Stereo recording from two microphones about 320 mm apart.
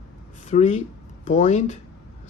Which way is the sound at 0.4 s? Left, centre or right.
Left.